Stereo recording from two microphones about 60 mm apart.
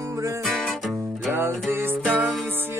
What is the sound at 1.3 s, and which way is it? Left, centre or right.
Music, right.